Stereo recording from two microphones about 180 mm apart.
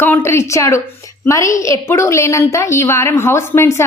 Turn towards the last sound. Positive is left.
turn(degrees=15)  # may be behind; listen again after turning